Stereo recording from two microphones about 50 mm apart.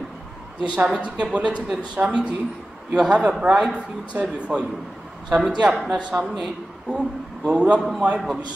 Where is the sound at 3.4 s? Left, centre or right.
Centre.